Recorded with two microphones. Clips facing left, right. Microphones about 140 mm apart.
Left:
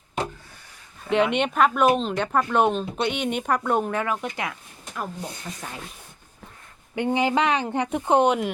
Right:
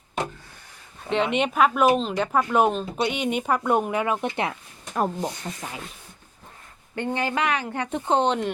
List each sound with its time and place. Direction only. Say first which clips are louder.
1.1 s speech: left 1 dB; centre (ahead or behind)
4.0 s speech: right 3 dB; 20° right (ahead or behind)
4.9 s speech: right 7 dB; 40° right (ahead or behind)
6.9 s speech: left 4 dB; 15° left (ahead or behind)